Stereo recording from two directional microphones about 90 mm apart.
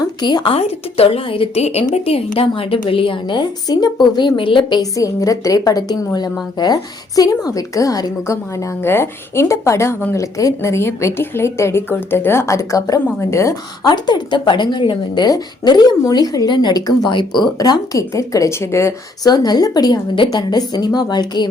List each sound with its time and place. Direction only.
0.2 s speech: 55° left (ahead or behind)
0.4 s a woman's voice: 90° left; by 4.8 s 70° left (ahead or behind)
4.8 s a woman's voice: 40° left (ahead or behind)
13.8 s speech: 55° left (ahead or behind); by 18.9 s 30° left (ahead or behind)
19.2 s speech: 45° left (ahead or behind)